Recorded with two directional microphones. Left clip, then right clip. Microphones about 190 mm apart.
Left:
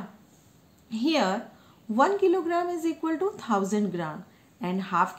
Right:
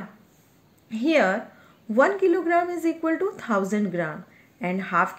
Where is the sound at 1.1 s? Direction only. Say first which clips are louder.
Right 7 dB; 20° right (ahead or behind).